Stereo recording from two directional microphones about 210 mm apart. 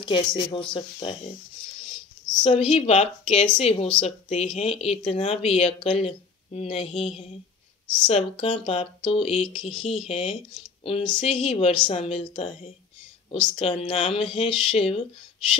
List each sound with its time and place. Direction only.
0.0 s speech: 20° left (ahead or behind)
2.7 s speech: 35° left (ahead or behind)